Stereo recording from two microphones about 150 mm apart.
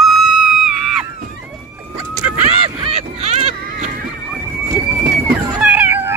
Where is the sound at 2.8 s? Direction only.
45° right (ahead or behind).